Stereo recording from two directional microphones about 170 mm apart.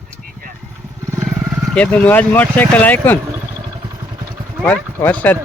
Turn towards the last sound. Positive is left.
turn(degrees=10)  # may be behind; listen again after turning